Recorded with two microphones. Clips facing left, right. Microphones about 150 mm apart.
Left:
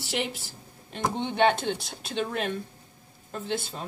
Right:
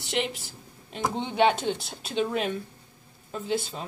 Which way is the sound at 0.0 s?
Centre (ahead or behind).